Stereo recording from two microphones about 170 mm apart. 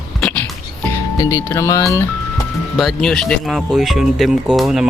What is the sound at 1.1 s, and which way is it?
Speech, 15° left (ahead or behind).